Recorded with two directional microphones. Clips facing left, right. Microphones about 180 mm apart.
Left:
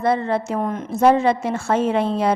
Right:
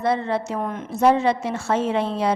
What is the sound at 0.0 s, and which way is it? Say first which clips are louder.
A woman's voice: left 2 dB; 50° left (ahead or behind).